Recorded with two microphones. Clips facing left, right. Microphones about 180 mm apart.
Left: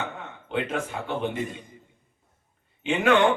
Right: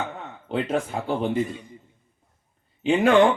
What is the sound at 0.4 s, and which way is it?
Speech, 35° right (ahead or behind).